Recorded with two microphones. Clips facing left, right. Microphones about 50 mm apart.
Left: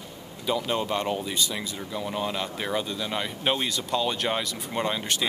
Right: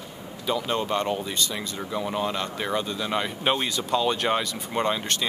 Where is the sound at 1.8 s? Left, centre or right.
Centre.